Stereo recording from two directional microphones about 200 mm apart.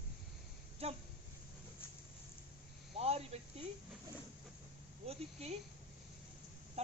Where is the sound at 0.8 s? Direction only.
30° right (ahead or behind).